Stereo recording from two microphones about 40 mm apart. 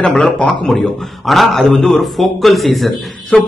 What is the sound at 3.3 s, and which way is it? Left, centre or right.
Speech, left.